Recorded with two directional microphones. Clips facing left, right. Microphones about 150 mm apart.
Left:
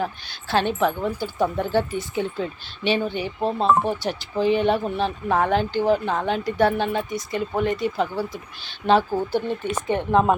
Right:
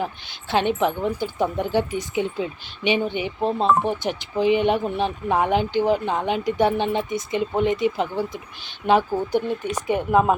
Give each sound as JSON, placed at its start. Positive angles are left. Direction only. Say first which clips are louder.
{"t": 0.5, "sound": "speech", "louder": "even", "side_deg": -20}